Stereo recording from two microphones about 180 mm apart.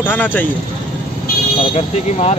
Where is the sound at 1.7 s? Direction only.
40° left (ahead or behind).